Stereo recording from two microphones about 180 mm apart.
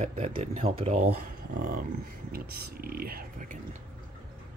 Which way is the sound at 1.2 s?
50° right (ahead or behind).